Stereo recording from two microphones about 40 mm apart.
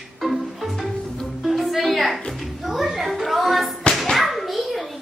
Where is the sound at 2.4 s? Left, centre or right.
Centre.